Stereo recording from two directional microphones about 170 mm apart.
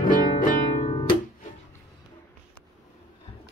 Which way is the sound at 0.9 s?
30° left (ahead or behind).